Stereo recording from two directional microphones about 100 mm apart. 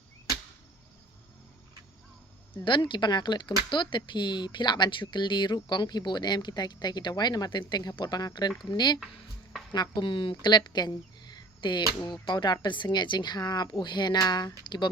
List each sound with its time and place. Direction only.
2.6 s speech: 55° left (ahead or behind)
10.7 s a sound: 45° left (ahead or behind)
12.2 s speech: 50° left (ahead or behind)